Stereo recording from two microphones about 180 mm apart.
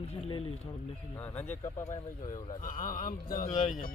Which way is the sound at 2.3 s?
45° left (ahead or behind).